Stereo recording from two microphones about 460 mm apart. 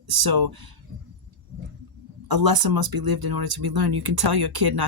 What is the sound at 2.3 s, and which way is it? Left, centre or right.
Speech, right.